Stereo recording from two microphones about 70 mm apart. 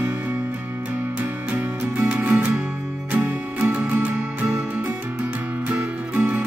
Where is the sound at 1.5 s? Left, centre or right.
Centre.